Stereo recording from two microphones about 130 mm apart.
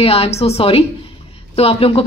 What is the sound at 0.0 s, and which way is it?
Speech, 50° left (ahead or behind).